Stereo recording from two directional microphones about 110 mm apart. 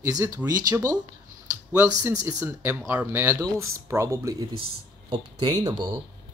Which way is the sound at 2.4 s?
15° right (ahead or behind).